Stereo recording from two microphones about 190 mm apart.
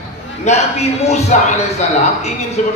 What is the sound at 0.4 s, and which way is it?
A man's voice, 35° left (ahead or behind).